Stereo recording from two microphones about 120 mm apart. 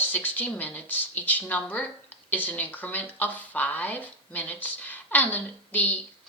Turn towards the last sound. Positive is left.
turn(degrees=15)  # may be behind; listen again after turning